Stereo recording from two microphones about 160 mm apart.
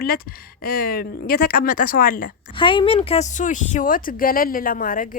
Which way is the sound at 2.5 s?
30° left (ahead or behind).